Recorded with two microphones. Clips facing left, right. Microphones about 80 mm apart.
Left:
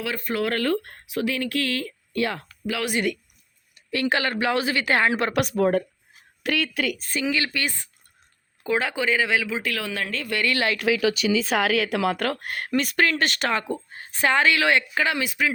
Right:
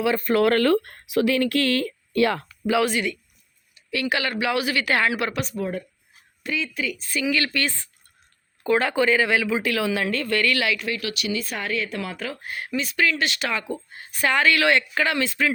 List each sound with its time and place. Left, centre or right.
0.3 s speech: right
0.6 s speech: right
3.9 s speech: left
5.3 s speech: left
6.4 s a woman's voice: left
7.2 s speech: left
8.6 s speech: centre
10.2 s speech: centre
10.8 s a woman's voice: left; by 15.5 s centre